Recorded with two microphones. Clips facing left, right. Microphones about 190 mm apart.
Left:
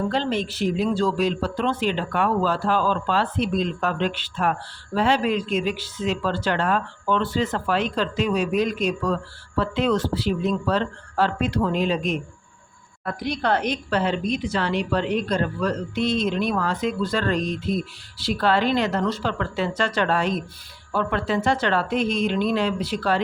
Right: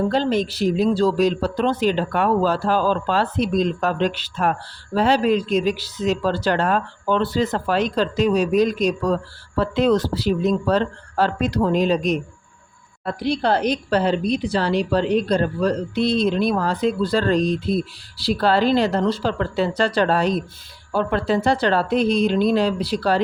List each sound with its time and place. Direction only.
0.1 s a woman's voice: 40° right (ahead or behind)